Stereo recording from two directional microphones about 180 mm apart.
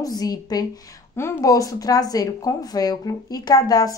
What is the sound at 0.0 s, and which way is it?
Speech, 20° left (ahead or behind).